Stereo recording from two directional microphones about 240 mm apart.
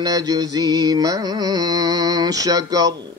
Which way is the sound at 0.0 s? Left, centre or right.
Centre.